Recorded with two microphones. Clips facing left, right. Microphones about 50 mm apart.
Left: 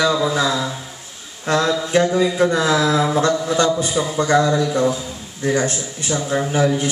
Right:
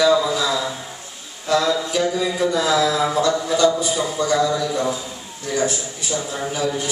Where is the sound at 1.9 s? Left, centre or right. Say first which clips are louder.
Left 4 dB; left.